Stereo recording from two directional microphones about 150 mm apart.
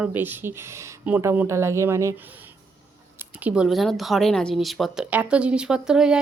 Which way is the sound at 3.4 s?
5° right (ahead or behind).